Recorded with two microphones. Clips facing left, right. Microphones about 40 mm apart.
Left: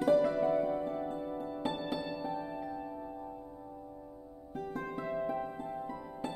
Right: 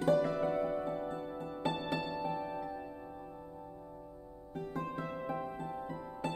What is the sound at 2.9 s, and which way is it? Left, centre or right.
Music, centre.